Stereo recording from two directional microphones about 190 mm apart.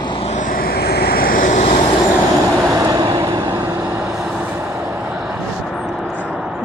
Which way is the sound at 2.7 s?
20° right (ahead or behind).